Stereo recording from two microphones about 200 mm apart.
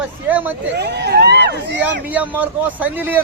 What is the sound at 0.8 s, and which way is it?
Speech, 55° right (ahead or behind).